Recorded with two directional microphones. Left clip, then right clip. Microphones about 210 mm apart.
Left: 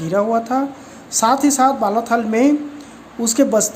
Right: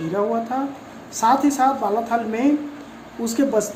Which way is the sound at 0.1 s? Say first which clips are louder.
Left 6 dB; 50° left (ahead or behind).